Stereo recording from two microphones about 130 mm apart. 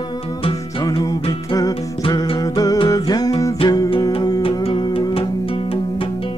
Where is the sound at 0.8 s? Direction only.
30° left (ahead or behind).